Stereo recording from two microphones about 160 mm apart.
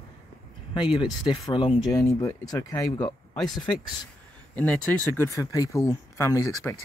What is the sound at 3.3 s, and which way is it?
Speech, centre (ahead or behind).